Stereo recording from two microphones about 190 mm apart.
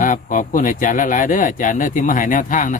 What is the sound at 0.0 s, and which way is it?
Speech, 45° left (ahead or behind).